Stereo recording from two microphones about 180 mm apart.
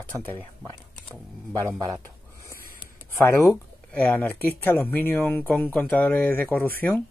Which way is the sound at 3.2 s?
15° left (ahead or behind).